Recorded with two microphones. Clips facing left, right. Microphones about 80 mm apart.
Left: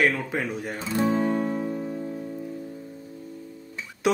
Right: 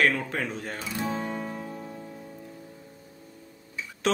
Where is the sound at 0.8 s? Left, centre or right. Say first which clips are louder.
Left 10 dB; left.